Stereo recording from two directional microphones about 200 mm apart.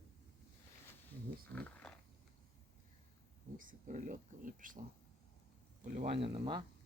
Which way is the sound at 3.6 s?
40° right (ahead or behind).